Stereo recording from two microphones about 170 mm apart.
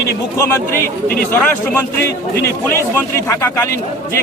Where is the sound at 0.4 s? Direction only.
15° left (ahead or behind).